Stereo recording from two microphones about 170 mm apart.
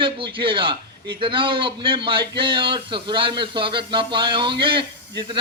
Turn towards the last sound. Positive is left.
turn(degrees=-30)  # may be behind; listen again after turning